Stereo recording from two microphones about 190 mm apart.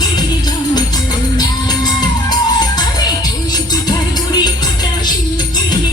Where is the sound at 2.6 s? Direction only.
20° left (ahead or behind).